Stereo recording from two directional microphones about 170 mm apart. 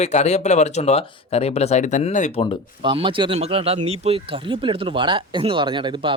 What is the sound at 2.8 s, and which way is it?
Speech, 30° right (ahead or behind).